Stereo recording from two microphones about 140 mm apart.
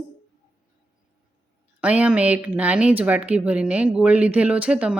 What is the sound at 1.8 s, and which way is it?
Speech, 10° right (ahead or behind).